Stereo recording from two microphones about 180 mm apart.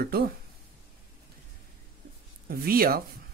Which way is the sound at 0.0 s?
60° right (ahead or behind).